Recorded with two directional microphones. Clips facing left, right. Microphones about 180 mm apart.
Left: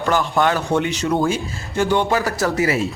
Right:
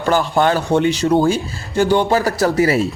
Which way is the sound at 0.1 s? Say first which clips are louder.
Right 3 dB; 35° right (ahead or behind).